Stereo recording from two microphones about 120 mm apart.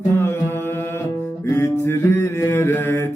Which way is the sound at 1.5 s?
20° left (ahead or behind).